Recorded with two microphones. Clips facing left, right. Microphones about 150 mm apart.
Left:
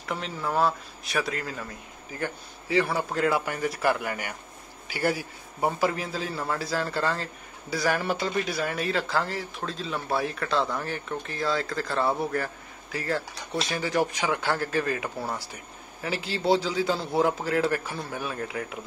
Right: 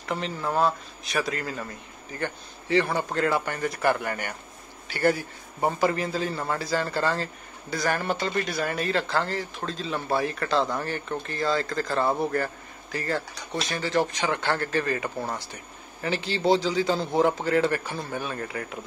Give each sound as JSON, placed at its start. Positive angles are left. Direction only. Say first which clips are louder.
{"t": 0.1, "sound": "speech", "louder": "right 1 dB", "side_deg": 0}